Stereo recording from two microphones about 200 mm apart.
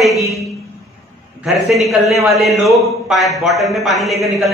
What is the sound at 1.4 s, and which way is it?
A man's voice, centre (ahead or behind).